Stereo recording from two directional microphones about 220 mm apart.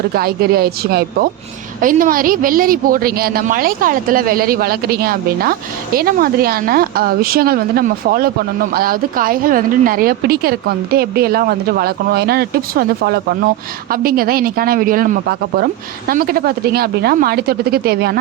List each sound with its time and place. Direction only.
0.1 s a woman's voice: 45° right (ahead or behind)